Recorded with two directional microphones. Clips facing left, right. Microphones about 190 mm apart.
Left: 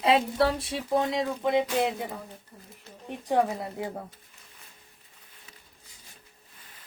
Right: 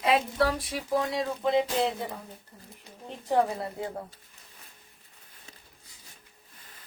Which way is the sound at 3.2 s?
15° left (ahead or behind).